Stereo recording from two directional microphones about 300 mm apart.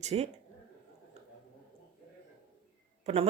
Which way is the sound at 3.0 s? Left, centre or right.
Centre.